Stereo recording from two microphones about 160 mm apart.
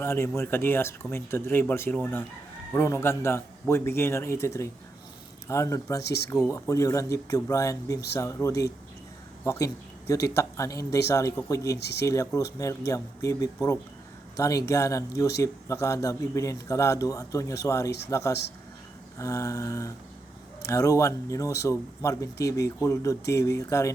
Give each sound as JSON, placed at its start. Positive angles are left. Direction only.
{"t": 0.0, "sound": "speech", "side_deg": 15}